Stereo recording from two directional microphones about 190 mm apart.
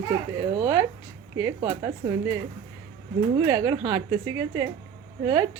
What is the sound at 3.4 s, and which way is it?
Speech, 15° right (ahead or behind).